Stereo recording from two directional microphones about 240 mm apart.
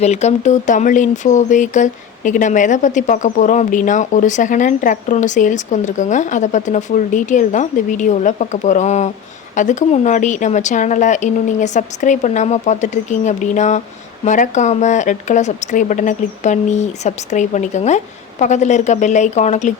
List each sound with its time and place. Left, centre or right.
0.0 s speech: left